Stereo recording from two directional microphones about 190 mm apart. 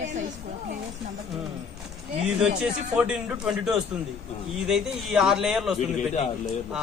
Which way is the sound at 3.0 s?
5° right (ahead or behind).